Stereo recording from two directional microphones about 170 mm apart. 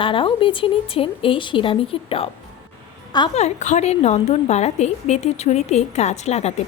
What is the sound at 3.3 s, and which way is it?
A woman's voice, 45° left (ahead or behind).